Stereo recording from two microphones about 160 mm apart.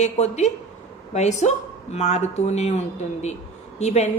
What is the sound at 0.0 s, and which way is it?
A woman's voice, 45° left (ahead or behind).